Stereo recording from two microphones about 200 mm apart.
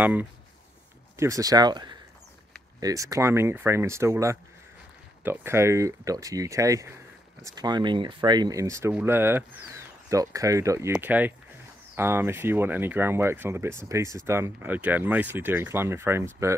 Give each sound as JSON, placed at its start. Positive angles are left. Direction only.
{"t": 0.0, "sound": "speech", "side_deg": -10}